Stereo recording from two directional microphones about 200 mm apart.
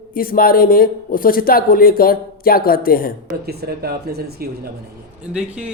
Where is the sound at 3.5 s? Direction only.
50° right (ahead or behind).